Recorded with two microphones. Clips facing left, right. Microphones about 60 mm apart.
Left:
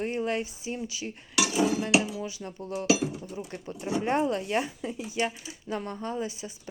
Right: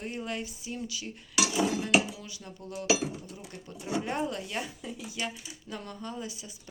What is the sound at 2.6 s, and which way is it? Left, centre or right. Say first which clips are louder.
Speech: left 5 dB; left.